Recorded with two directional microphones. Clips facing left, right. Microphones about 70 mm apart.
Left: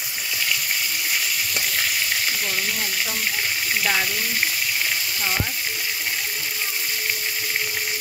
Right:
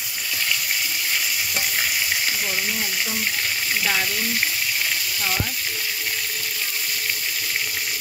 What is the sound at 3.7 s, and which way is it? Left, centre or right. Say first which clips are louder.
Speech: left 1 dB; centre.